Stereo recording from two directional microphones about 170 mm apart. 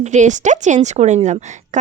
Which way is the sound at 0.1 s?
45° right (ahead or behind).